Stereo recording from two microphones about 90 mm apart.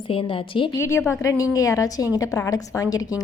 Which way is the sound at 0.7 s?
30° left (ahead or behind).